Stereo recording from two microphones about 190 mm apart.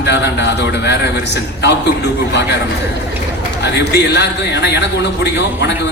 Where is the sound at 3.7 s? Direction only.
60° left (ahead or behind).